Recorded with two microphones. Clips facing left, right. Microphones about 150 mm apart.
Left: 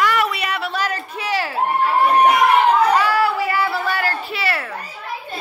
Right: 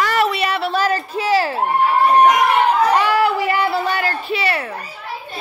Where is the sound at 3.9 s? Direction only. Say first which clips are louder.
Right 2 dB; 20° right (ahead or behind).